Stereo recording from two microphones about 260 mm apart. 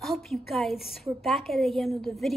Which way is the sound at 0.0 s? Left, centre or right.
Centre.